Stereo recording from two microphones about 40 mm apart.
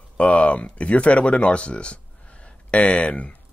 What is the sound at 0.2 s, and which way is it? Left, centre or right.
Speech, left.